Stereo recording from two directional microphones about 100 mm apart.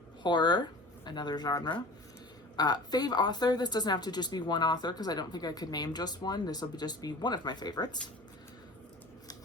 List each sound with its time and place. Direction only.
0.2 s a woman's voice: 45° left (ahead or behind)